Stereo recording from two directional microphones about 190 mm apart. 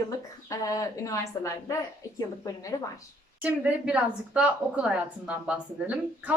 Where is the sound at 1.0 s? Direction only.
15° left (ahead or behind).